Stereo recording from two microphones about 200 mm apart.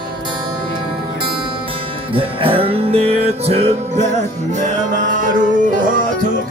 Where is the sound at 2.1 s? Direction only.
25° right (ahead or behind).